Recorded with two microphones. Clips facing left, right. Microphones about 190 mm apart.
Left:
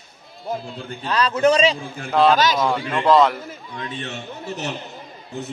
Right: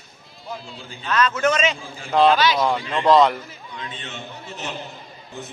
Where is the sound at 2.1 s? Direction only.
Centre (ahead or behind).